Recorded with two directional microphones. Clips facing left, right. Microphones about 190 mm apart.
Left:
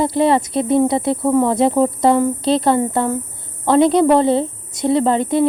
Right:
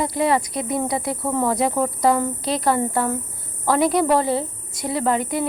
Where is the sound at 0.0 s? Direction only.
30° left (ahead or behind).